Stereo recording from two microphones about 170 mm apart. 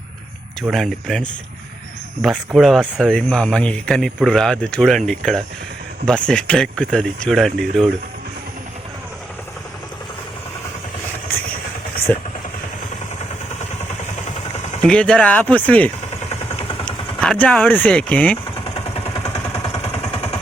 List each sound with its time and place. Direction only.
0.6 s speech: centre (ahead or behind)
12.1 s speech: 10° left (ahead or behind)
14.8 s speech: 5° left (ahead or behind)
16.3 s vehicle: 35° left (ahead or behind)
16.8 s speech: 5° left (ahead or behind)
18.5 s vehicle: 35° left (ahead or behind)
19.2 s vehicle: 15° left (ahead or behind)
19.9 s vehicle: 35° left (ahead or behind)